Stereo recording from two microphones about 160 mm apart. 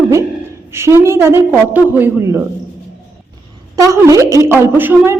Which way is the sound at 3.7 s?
20° right (ahead or behind).